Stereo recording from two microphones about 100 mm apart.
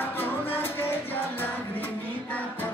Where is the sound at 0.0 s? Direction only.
20° left (ahead or behind).